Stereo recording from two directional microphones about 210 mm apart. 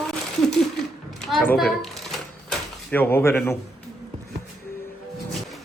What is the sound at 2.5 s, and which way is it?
Door, 10° left (ahead or behind).